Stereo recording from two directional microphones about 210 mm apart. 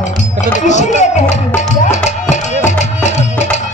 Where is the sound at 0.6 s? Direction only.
35° left (ahead or behind).